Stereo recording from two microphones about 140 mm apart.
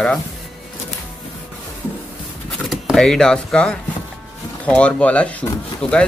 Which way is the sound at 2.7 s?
Centre (ahead or behind).